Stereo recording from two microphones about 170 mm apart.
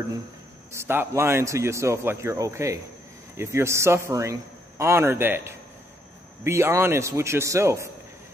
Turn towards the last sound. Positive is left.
turn(degrees=-15)  # may be behind; listen again after turning